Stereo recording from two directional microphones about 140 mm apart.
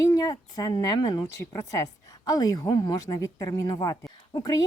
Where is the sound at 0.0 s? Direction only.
25° left (ahead or behind).